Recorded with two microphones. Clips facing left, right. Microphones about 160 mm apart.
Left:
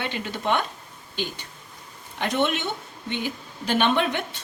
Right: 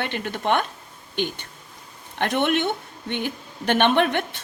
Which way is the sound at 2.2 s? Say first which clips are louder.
Right 3 dB; 55° right (ahead or behind).